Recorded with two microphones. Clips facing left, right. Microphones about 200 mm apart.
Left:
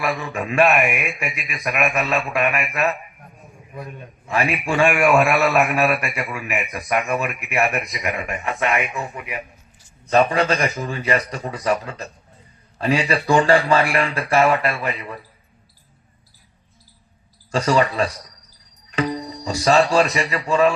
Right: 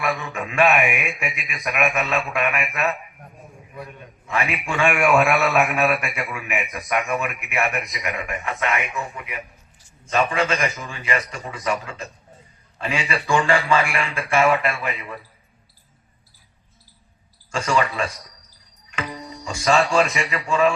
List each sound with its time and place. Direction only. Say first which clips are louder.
0.0 s a man's voice: left 2 dB; centre (ahead or behind)
4.3 s a man's voice: left 3 dB; 35° left (ahead or behind)
4.8 s a man's voice: left 2 dB; centre (ahead or behind)
7.5 s a man's voice: left 4 dB; 30° left (ahead or behind)
10.1 s a man's voice: left 4 dB; 35° left (ahead or behind)
14.4 s a man's voice: left 1 dB; centre (ahead or behind)
17.5 s a man's voice: left 4 dB; 35° left (ahead or behind)
18.9 s music: left 8 dB; 35° left (ahead or behind)
20.0 s a man's voice: left 2 dB; centre (ahead or behind)